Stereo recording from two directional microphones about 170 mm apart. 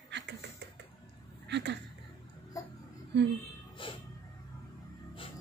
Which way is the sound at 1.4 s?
90° right.